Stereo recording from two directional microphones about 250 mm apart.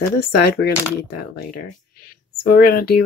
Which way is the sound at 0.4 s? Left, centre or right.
Left.